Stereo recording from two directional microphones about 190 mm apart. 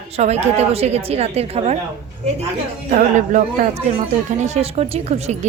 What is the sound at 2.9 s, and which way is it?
Speech, 40° right (ahead or behind).